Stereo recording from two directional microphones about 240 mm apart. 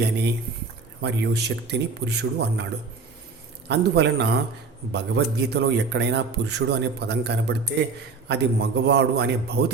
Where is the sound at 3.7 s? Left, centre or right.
Right.